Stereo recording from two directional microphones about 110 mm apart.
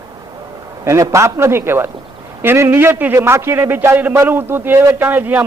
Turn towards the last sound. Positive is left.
turn(degrees=-20)  # may be behind; listen again after turning